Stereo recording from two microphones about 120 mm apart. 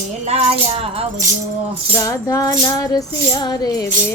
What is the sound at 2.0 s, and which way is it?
Music, 25° left (ahead or behind).